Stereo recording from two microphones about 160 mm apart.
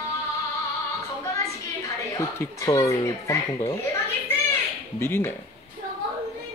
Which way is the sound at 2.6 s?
20° left (ahead or behind).